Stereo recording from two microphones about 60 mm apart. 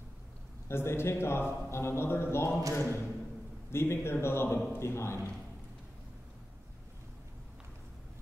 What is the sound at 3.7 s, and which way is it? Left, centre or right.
A man's voice, left.